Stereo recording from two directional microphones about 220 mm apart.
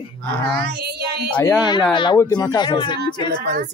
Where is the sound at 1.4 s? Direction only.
5° left (ahead or behind).